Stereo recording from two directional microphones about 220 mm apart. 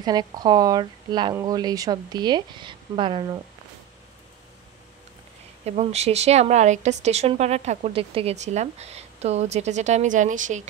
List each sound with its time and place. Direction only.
0.0 s speech: 20° right (ahead or behind)
5.7 s speech: 30° right (ahead or behind)